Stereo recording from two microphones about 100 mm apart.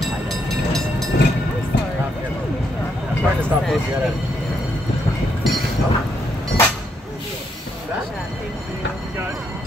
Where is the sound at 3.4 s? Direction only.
5° left (ahead or behind).